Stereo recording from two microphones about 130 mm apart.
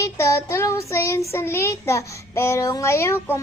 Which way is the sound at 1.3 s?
20° left (ahead or behind).